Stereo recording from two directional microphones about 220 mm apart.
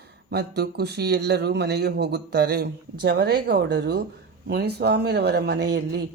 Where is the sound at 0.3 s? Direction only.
45° right (ahead or behind).